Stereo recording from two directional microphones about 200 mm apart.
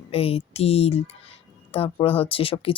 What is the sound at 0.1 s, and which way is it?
Speech, 30° left (ahead or behind).